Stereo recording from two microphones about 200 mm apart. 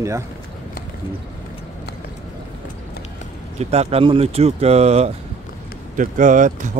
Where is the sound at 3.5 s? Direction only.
30° right (ahead or behind).